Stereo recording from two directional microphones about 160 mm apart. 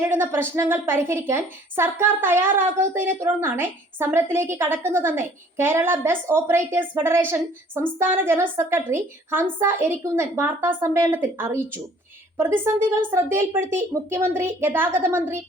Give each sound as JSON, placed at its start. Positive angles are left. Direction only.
{"t": 0.0, "sound": "a woman's voice", "side_deg": -15}
{"t": 13.0, "sound": "a woman's voice", "side_deg": -15}